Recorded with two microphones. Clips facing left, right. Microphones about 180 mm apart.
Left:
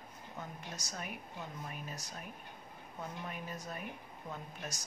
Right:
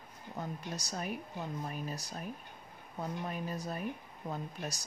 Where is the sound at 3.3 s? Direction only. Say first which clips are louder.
Right 5 dB; 35° right (ahead or behind).